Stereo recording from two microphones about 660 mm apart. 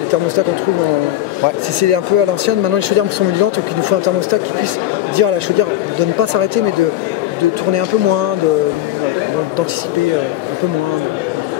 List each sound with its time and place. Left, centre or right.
1.8 s speech: right
5.1 s speech: right